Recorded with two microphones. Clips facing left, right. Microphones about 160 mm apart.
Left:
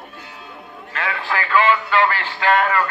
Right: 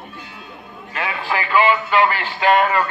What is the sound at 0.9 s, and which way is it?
A man's voice, 15° right (ahead or behind).